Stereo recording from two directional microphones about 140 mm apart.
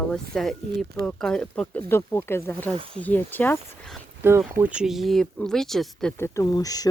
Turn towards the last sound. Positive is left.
turn(degrees=25)  # may be behind; listen again after turning